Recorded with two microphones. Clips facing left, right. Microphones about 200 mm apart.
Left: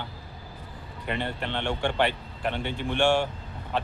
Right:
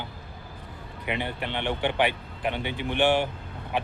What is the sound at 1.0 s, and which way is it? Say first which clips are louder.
Speech: even; 15° right (ahead or behind).